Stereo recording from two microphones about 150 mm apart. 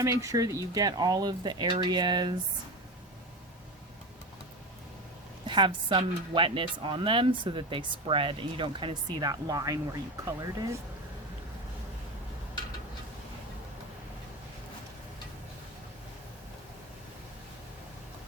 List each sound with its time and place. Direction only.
0.0 s speech: 20° right (ahead or behind)
5.5 s speech: 30° right (ahead or behind)